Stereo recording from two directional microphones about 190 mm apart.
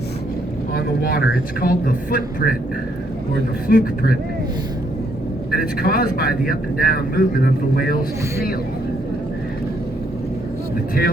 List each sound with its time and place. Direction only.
0.7 s speech: 55° left (ahead or behind)
3.7 s speech: 50° left (ahead or behind)
5.5 s speech: 50° left (ahead or behind)
11.0 s speech: 50° left (ahead or behind)